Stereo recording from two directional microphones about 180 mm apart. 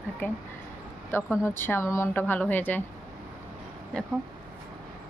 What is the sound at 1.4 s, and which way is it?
A woman's voice, 15° left (ahead or behind).